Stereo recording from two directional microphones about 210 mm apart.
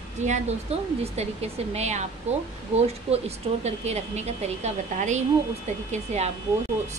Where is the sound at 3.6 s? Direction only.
30° right (ahead or behind).